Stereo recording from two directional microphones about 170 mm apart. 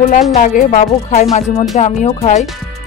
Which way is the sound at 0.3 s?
50° left (ahead or behind).